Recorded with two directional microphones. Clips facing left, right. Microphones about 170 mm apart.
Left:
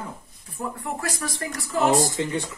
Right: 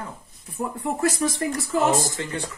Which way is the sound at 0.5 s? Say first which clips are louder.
Right 3 dB; 20° right (ahead or behind).